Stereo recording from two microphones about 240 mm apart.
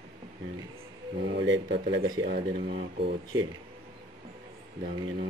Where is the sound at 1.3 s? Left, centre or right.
Right.